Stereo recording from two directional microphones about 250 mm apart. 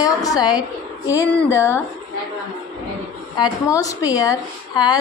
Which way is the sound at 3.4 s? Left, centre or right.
Centre.